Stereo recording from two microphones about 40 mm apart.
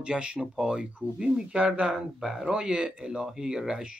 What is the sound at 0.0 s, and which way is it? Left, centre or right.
Speech, right.